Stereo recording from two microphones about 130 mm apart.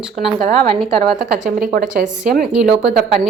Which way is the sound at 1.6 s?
90° right.